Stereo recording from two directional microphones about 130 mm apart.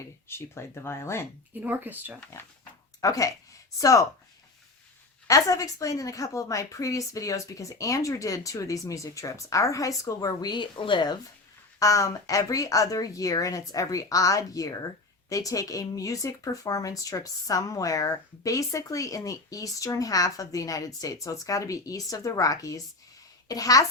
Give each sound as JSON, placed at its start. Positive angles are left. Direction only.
{"t": 0.3, "sound": "speech", "side_deg": 20}
{"t": 1.6, "sound": "speech", "side_deg": -15}
{"t": 3.0, "sound": "speech", "side_deg": 25}
{"t": 5.3, "sound": "speech", "side_deg": 25}
{"t": 11.8, "sound": "speech", "side_deg": 25}